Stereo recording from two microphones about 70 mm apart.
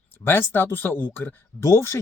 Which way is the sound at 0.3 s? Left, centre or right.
Left.